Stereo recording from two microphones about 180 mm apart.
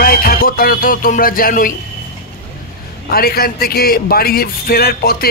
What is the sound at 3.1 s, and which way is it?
A man's voice, 55° left (ahead or behind).